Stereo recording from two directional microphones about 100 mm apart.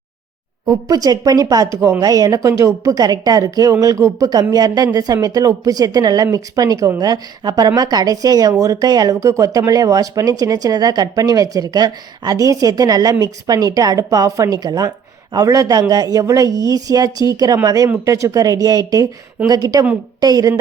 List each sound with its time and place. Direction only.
0.6 s a woman's voice: 40° right (ahead or behind)